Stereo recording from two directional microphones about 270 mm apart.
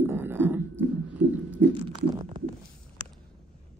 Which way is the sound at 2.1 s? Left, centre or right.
Centre.